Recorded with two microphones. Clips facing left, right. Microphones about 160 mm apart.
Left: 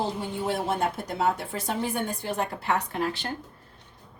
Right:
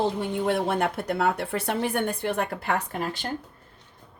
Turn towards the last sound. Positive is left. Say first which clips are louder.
# left 1 dB
turn(degrees=-50)  # may be behind; listen again after turning